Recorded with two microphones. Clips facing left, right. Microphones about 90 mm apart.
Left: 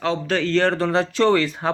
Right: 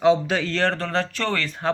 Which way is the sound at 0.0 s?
15° right (ahead or behind).